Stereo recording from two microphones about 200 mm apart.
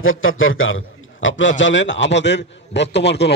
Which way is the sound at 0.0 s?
85° left.